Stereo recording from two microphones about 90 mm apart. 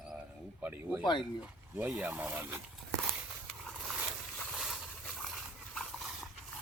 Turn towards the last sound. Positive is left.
turn(degrees=0)  # may be behind; listen again after turning